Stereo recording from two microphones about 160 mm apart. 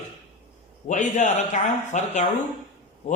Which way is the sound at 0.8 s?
50° left (ahead or behind).